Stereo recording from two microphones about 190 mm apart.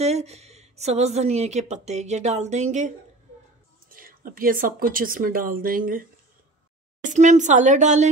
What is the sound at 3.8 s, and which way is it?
Speech, 50° right (ahead or behind).